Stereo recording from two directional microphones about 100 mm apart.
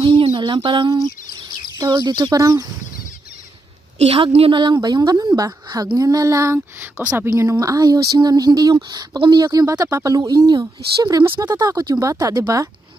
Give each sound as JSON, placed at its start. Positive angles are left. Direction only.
{"t": 0.0, "sound": "a sound", "side_deg": -55}
{"t": 1.0, "sound": "bird", "side_deg": -40}
{"t": 2.4, "sound": "speech", "side_deg": -40}
{"t": 4.0, "sound": "a woman's voice", "side_deg": -90}
{"t": 4.8, "sound": "speech", "side_deg": -45}
{"t": 7.0, "sound": "speech", "side_deg": -15}
{"t": 7.2, "sound": "speech", "side_deg": -35}